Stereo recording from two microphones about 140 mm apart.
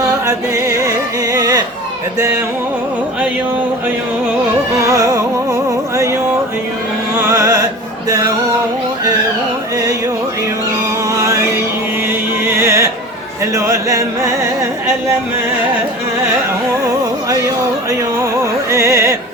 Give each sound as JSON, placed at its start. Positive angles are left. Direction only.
{"t": 0.0, "sound": "music", "side_deg": -20}
{"t": 4.9, "sound": "music", "side_deg": -20}
{"t": 7.3, "sound": "music", "side_deg": -20}
{"t": 12.5, "sound": "music", "side_deg": -20}
{"t": 18.7, "sound": "music", "side_deg": -20}